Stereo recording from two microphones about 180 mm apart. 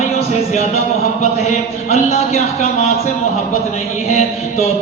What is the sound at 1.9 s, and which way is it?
Speech, 35° left (ahead or behind).